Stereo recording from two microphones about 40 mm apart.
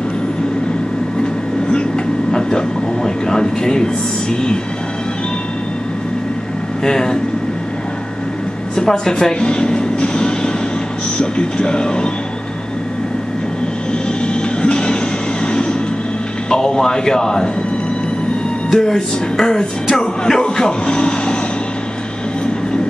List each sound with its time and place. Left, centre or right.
2.3 s a sound: centre
6.8 s speech: centre
8.7 s speech: centre
9.5 s vehicle: left
11.1 s speech: left
14.2 s music: left
16.4 s speech: centre
18.7 s speech: centre